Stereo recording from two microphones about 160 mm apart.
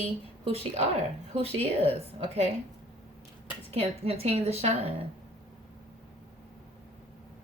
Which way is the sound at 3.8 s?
40° right (ahead or behind).